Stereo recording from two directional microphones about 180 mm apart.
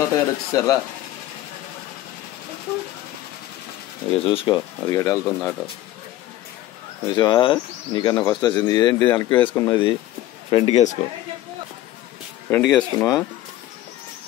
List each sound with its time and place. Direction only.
0.1 s speech: 20° left (ahead or behind)
4.1 s speech: 30° left (ahead or behind); by 5.6 s 5° left (ahead or behind)
7.1 s speech: 25° left (ahead or behind)
10.5 s a man's voice: 35° left (ahead or behind)
12.7 s speech: 20° left (ahead or behind)